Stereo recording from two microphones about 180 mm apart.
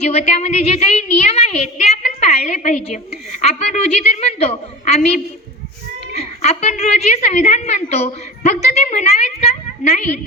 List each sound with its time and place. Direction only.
0.0 s a woman's voice: 35° left (ahead or behind)